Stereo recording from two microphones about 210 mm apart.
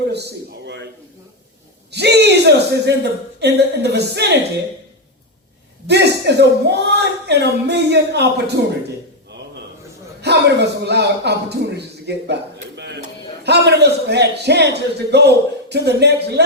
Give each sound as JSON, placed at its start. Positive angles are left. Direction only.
{"t": 0.1, "sound": "a sound", "side_deg": -55}
{"t": 1.9, "sound": "a man's voice", "side_deg": -50}
{"t": 5.9, "sound": "a man's voice", "side_deg": -50}
{"t": 10.2, "sound": "a man's voice", "side_deg": -50}
{"t": 12.7, "sound": "a sound", "side_deg": -55}
{"t": 13.4, "sound": "a man's voice", "side_deg": -50}